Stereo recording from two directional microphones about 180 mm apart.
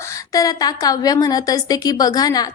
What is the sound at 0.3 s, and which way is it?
A woman's voice, 20° left (ahead or behind).